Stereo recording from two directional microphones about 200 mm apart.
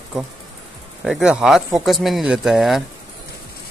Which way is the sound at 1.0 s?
5° right (ahead or behind).